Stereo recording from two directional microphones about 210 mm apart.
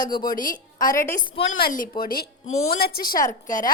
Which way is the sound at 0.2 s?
40° left (ahead or behind).